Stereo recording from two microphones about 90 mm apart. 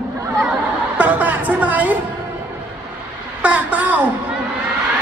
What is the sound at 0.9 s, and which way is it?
Music, 20° right (ahead or behind).